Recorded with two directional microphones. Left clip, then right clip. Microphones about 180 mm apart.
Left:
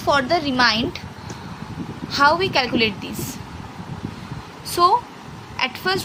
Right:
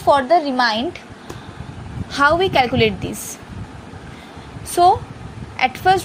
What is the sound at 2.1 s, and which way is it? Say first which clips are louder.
A woman's voice: right 2 dB; 15° right (ahead or behind).